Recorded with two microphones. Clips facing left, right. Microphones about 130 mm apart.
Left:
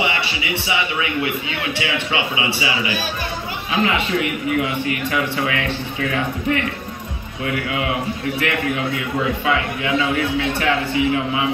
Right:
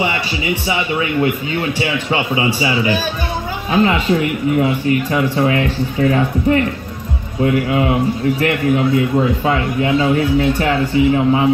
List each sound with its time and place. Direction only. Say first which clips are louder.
0.7 s a man's voice: right 3 dB; 40° right (ahead or behind)